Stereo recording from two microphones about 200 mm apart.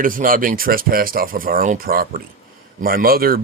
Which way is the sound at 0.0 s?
45° right (ahead or behind).